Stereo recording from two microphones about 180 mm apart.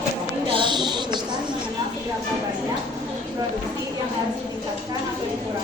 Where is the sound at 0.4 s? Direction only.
25° right (ahead or behind).